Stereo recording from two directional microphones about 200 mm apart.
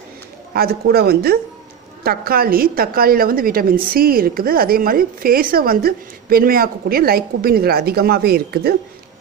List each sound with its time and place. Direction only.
0.5 s a woman's voice: 50° right (ahead or behind)